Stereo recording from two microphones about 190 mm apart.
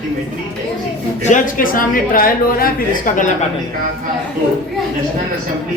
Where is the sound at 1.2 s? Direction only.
45° left (ahead or behind).